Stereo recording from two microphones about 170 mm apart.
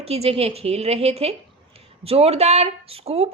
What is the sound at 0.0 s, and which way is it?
A woman's voice, 35° right (ahead or behind).